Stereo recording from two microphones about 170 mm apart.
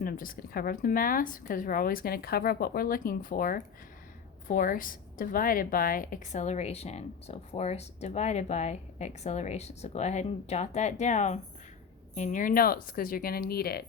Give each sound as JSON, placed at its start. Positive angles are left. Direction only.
{"t": 0.0, "sound": "a woman's voice", "side_deg": 55}